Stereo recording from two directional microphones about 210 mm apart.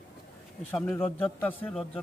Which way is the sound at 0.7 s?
5° left (ahead or behind).